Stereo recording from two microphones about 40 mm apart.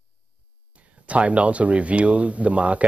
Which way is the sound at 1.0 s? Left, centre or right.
Right.